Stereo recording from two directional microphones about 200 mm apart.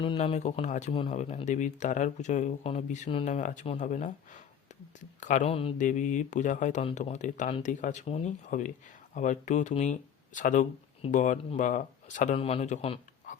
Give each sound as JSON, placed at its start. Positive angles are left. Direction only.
{"t": 0.0, "sound": "a man's voice", "side_deg": 25}